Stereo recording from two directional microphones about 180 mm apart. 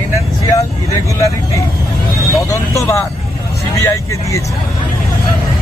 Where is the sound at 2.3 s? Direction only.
15° left (ahead or behind).